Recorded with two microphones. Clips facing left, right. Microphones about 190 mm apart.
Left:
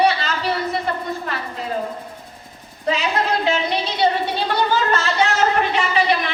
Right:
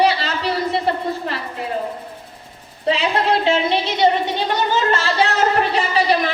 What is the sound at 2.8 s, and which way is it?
A woman's voice, 30° right (ahead or behind).